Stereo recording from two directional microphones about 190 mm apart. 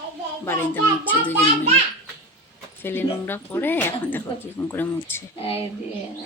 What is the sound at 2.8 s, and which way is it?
Speech, 10° left (ahead or behind).